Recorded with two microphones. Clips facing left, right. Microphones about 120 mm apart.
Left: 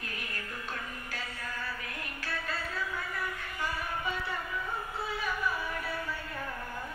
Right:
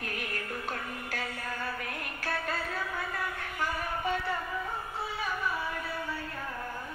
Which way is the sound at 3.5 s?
55° right (ahead or behind).